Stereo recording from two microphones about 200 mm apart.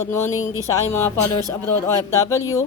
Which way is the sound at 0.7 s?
10° left (ahead or behind).